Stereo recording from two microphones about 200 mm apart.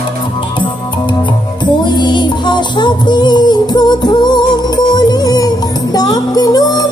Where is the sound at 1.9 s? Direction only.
20° left (ahead or behind).